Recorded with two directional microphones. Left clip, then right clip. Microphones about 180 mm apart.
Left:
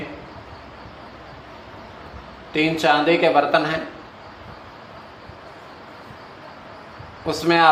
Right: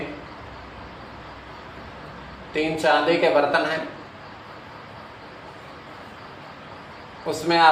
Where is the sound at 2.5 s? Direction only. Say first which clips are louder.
Left 2 dB; 55° left (ahead or behind).